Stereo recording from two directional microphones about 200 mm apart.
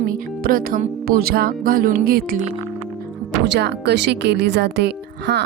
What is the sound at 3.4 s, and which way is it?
Speech, 60° right (ahead or behind).